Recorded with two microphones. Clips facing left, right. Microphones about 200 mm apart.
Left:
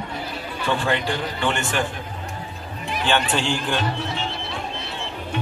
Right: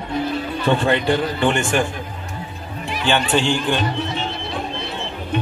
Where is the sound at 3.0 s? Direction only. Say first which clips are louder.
Right 4 dB; centre (ahead or behind).